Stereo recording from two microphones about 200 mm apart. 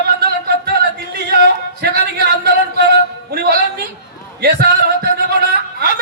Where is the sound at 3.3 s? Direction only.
50° right (ahead or behind).